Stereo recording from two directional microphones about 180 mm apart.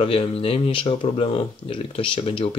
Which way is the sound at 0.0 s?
30° left (ahead or behind).